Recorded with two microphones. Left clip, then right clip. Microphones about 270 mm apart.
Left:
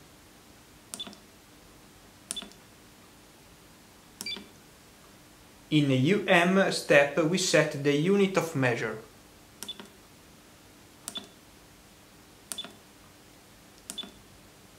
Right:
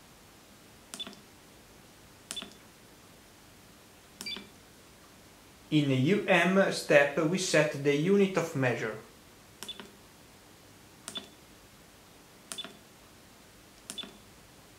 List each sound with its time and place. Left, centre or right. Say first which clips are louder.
0.9 s a sound: left 1 dB; centre
2.3 s cash register: left 1 dB; centre
4.2 s cash register: left 2 dB; centre
5.7 s speech: left 2 dB; centre
9.6 s cash register: left 2 dB; centre
11.1 s a sound: left 1 dB; centre
12.5 s cash register: left 2 dB; centre
13.9 s cash register: left 2 dB; centre